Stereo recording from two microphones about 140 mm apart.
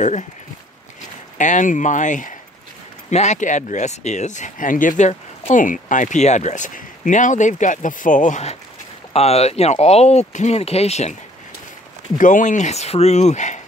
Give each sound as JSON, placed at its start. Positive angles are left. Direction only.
{"t": 1.4, "sound": "speech", "side_deg": 65}
{"t": 3.1, "sound": "speech", "side_deg": 55}
{"t": 12.2, "sound": "speech", "side_deg": 65}